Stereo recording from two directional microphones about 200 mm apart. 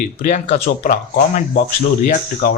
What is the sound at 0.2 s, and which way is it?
Speech, 40° left (ahead or behind).